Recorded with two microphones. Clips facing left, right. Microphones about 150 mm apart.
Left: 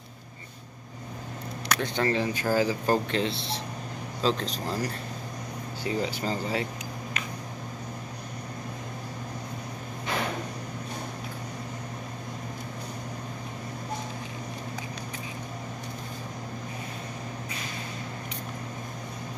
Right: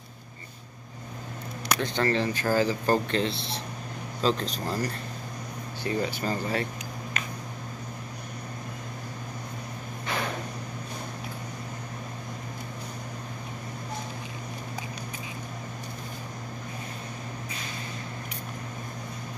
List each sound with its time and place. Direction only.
1.7 s speech: 10° left (ahead or behind)
4.2 s speech: centre (ahead or behind)
5.9 s speech: 15° left (ahead or behind)